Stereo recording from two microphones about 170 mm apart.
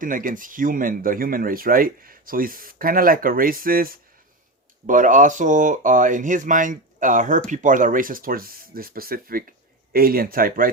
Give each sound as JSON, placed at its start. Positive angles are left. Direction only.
{"t": 0.0, "sound": "speech", "side_deg": -50}